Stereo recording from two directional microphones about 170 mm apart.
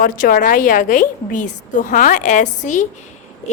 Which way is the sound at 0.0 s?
55° left (ahead or behind).